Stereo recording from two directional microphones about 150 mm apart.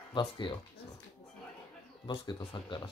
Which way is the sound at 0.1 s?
30° left (ahead or behind).